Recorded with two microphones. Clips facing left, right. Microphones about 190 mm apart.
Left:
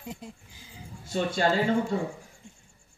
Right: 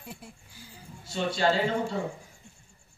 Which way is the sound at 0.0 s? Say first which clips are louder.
Left 5 dB; 20° left (ahead or behind).